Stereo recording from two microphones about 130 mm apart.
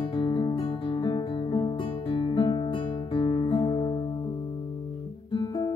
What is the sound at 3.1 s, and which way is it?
Music, 35° left (ahead or behind).